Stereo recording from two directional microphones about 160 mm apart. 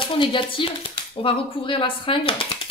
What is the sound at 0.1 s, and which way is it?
A woman's voice, 30° left (ahead or behind).